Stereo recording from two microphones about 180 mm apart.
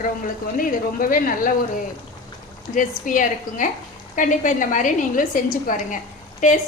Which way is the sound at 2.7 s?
45° left (ahead or behind).